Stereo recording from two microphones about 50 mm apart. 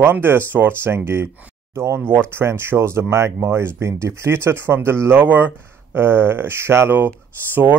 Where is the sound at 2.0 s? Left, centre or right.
Right.